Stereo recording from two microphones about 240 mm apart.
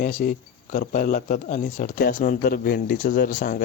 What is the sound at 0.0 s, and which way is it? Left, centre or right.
Speech, left.